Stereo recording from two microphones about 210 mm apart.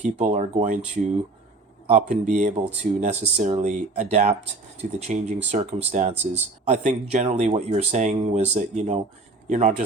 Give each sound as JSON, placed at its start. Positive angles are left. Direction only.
{"t": 0.0, "sound": "speech", "side_deg": -35}
{"t": 1.9, "sound": "speech", "side_deg": -35}